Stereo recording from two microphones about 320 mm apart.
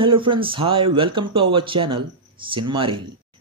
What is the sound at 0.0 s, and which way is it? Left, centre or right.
Speech, centre.